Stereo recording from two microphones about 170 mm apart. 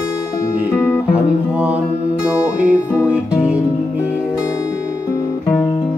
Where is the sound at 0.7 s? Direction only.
15° left (ahead or behind).